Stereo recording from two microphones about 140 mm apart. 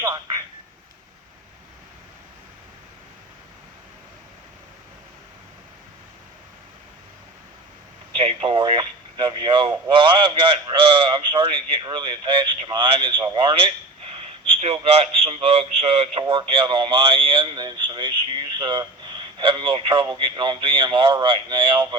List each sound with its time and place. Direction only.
0.0 s speech: 30° right (ahead or behind)
8.2 s a man's voice: 45° right (ahead or behind)